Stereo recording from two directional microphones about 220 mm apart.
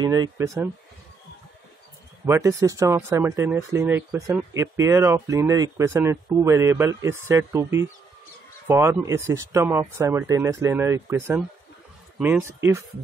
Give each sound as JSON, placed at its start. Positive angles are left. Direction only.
{"t": 0.0, "sound": "speech", "side_deg": -20}
{"t": 2.2, "sound": "speech", "side_deg": -15}